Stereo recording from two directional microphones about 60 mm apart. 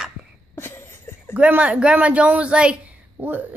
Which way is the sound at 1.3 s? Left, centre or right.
Right.